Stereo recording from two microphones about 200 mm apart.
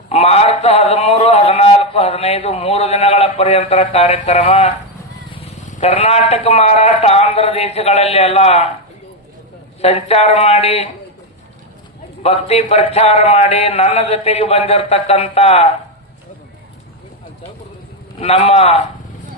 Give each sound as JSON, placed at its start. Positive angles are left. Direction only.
{"t": 0.1, "sound": "a sound", "side_deg": 30}
{"t": 5.7, "sound": "a man's voice", "side_deg": 30}
{"t": 9.8, "sound": "a man's voice", "side_deg": 30}
{"t": 12.2, "sound": "a man's voice", "side_deg": 30}
{"t": 18.2, "sound": "a man's voice", "side_deg": 30}